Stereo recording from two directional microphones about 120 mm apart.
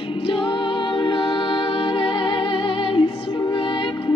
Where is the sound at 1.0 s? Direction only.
45° left (ahead or behind).